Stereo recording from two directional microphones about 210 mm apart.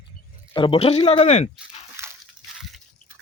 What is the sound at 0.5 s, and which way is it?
Speech, 25° left (ahead or behind).